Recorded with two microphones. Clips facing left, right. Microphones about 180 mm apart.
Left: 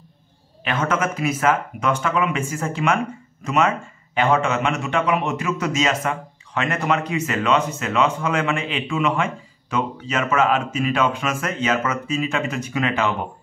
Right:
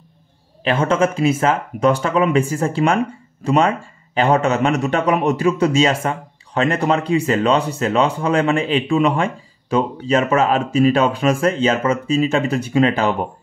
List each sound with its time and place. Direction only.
0.7 s a man's voice: 30° right (ahead or behind)